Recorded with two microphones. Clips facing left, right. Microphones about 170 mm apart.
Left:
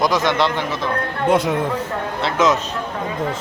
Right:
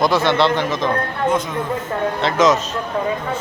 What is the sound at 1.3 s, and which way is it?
Speech, 65° left (ahead or behind).